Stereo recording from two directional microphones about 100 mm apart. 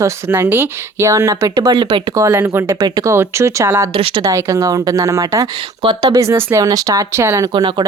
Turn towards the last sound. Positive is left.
turn(degrees=-50)  # may be behind; listen again after turning